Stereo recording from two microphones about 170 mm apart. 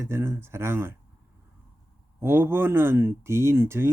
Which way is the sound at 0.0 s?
15° right (ahead or behind).